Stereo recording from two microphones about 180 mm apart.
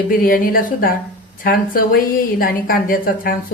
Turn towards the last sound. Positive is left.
turn(degrees=50)  # may be behind; listen again after turning